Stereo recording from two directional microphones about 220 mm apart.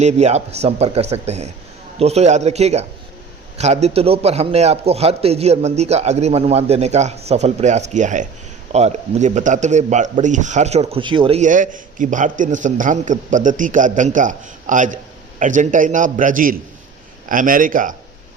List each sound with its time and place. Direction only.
0.0 s a man's voice: 30° right (ahead or behind)